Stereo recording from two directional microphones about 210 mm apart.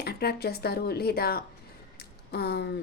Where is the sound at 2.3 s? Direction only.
50° left (ahead or behind).